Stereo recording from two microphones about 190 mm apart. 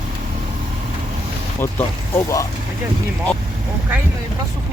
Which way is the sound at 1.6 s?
15° left (ahead or behind).